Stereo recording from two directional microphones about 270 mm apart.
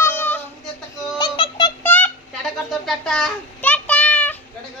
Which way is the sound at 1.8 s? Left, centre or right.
Centre.